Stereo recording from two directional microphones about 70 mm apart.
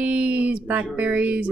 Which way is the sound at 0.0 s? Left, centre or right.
Right.